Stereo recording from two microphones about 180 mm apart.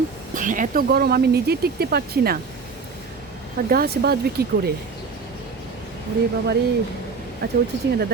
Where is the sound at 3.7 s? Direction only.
60° right (ahead or behind).